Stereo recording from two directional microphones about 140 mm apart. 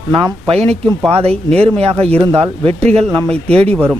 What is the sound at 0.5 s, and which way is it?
Speech, 50° right (ahead or behind).